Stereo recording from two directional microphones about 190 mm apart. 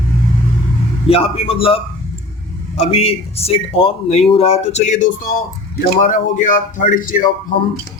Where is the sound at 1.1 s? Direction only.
30° left (ahead or behind); by 7.3 s 45° left (ahead or behind).